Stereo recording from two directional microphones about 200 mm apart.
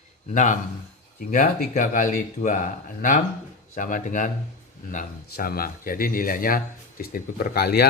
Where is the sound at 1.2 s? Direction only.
45° left (ahead or behind).